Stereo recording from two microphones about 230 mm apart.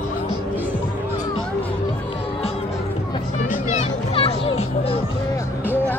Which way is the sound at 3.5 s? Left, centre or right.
Left.